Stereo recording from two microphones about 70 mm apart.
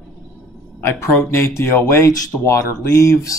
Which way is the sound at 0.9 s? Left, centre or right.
Left.